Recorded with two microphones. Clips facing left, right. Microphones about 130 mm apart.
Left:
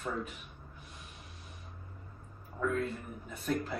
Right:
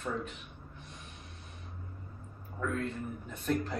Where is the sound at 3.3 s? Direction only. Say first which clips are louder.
Right 1 dB; 5° left (ahead or behind).